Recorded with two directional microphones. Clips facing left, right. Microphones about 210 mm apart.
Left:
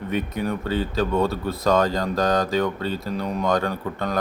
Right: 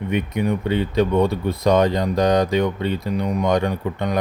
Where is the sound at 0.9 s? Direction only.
15° right (ahead or behind).